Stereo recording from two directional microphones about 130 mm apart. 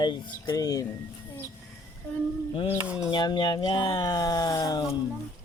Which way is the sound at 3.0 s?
35° left (ahead or behind).